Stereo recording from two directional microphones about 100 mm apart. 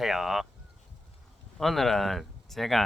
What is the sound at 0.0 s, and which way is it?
Speech, 5° right (ahead or behind).